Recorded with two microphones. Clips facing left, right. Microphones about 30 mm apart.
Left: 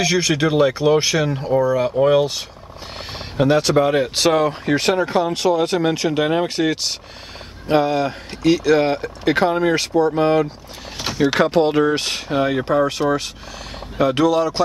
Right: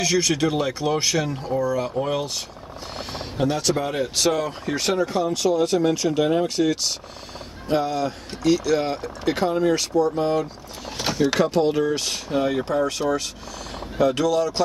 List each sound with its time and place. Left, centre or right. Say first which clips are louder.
0.0 s speech: left 3 dB; centre
11.0 s a sound: left 3 dB; centre
11.3 s speech: left 6 dB; left